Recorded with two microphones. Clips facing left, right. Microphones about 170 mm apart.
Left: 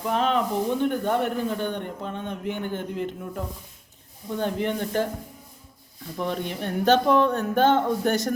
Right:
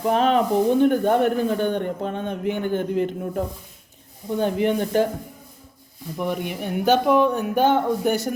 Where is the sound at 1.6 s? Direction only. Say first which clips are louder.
Right 6 dB; 55° right (ahead or behind).